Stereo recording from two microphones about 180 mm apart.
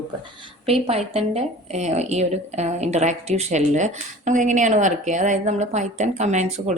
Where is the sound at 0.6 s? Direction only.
35° right (ahead or behind).